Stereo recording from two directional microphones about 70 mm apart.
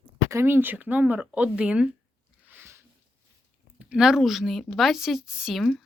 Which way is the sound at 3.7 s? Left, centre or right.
Centre.